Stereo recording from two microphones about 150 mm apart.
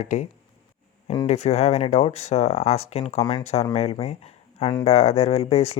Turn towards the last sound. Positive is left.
turn(degrees=45)  # may be behind; listen again after turning